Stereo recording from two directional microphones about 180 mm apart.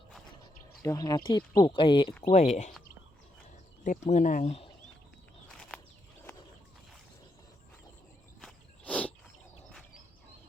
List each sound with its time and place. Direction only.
0.8 s speech: 20° left (ahead or behind)
2.3 s speech: 40° left (ahead or behind)
3.8 s speech: 40° left (ahead or behind)
5.5 s a sound: 5° left (ahead or behind)
8.4 s walk: 5° left (ahead or behind)